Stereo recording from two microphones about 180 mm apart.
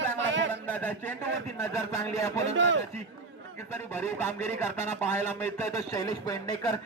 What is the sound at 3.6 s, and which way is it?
Speech, 15° left (ahead or behind).